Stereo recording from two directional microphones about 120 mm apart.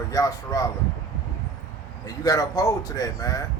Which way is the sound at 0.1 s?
25° left (ahead or behind).